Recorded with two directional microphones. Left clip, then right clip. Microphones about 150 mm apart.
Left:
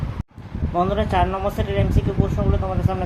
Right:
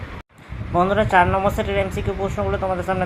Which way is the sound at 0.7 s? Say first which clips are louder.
Right 4 dB; 20° right (ahead or behind).